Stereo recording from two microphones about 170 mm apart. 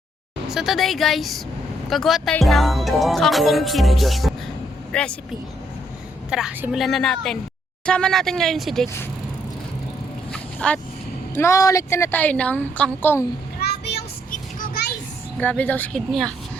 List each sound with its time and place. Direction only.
0.5 s speech: centre (ahead or behind)
6.3 s speech: 5° right (ahead or behind)
10.3 s vehicle: 5° left (ahead or behind)
11.3 s a woman's voice: 15° left (ahead or behind)
13.9 s vehicle: 60° left (ahead or behind)
15.4 s a woman's voice: 10° left (ahead or behind)